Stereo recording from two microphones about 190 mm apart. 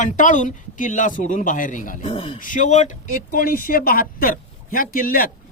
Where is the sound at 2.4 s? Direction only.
45° left (ahead or behind).